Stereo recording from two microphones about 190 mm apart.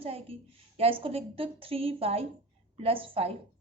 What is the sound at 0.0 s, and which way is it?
A woman's voice, 30° right (ahead or behind).